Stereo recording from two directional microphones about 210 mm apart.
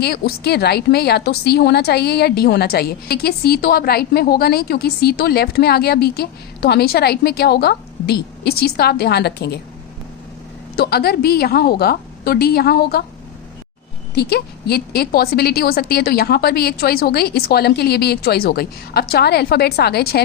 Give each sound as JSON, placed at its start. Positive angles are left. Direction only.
{"t": 0.0, "sound": "a woman's voice", "side_deg": 50}
{"t": 10.8, "sound": "a woman's voice", "side_deg": 45}
{"t": 14.2, "sound": "a woman's voice", "side_deg": 50}